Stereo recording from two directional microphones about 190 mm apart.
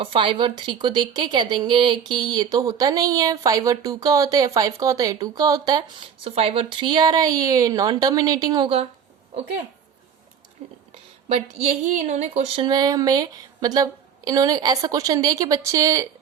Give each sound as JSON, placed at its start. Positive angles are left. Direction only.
{"t": 0.0, "sound": "a woman's voice", "side_deg": -25}
{"t": 10.6, "sound": "whispering", "side_deg": -30}
{"t": 11.3, "sound": "a woman's voice", "side_deg": -30}